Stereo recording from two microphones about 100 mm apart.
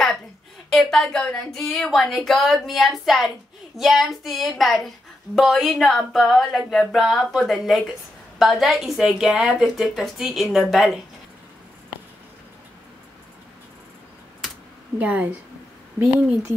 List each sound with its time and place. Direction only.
0.7 s a woman's voice: centre (ahead or behind)
15.0 s speech: 15° right (ahead or behind)